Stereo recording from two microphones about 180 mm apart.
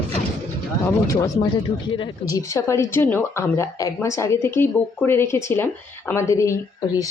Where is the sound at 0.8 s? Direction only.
20° left (ahead or behind).